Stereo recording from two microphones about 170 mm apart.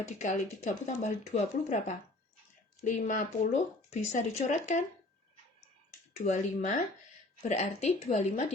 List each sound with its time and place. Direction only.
0.2 s speech: 45° left (ahead or behind)
6.1 s speech: 45° left (ahead or behind)